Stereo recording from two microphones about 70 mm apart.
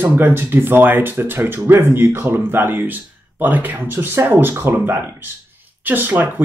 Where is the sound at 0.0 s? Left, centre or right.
Right.